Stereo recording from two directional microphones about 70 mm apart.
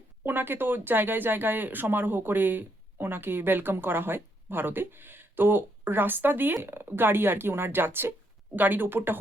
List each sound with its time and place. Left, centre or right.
0.3 s speech: right